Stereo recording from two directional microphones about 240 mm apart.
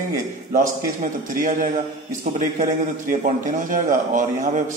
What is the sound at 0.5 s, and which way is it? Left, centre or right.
A man's voice, right.